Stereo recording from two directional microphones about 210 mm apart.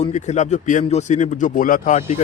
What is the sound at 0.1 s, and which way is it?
Speech, 35° left (ahead or behind).